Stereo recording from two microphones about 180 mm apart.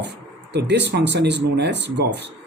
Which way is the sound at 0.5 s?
75° right (ahead or behind).